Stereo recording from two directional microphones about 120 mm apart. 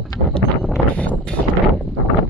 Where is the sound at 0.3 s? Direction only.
10° left (ahead or behind).